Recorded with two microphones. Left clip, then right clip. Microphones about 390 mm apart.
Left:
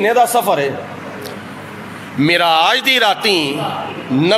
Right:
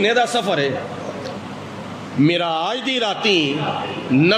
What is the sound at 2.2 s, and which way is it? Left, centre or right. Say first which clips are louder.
A man's voice: left 7 dB; left.